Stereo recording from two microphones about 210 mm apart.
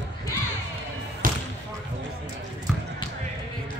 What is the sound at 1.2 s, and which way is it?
Basketball bounce, 40° right (ahead or behind).